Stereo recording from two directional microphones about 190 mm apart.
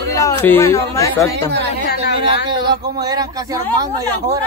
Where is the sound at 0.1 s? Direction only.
15° left (ahead or behind).